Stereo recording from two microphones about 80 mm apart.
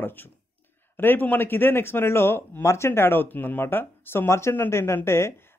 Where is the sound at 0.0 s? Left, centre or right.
Left.